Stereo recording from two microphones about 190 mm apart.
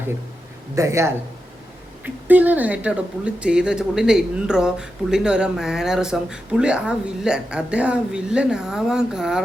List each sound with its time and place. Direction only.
0.8 s speech: 15° right (ahead or behind)